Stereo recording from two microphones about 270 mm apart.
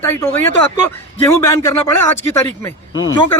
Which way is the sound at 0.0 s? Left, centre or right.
Centre.